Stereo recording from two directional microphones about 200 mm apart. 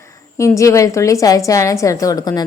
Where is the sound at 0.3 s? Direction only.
15° left (ahead or behind).